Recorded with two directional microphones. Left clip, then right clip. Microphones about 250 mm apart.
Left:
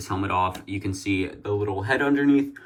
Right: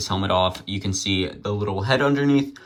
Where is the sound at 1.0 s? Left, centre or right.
Left.